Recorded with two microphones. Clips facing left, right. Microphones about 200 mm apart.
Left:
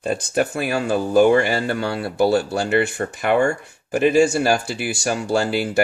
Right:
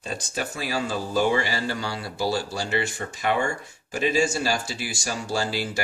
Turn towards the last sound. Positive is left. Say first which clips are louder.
# left 8 dB
turn(degrees=60)  # may be behind; listen again after turning